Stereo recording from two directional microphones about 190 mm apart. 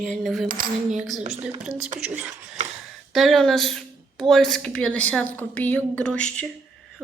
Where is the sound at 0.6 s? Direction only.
40° right (ahead or behind).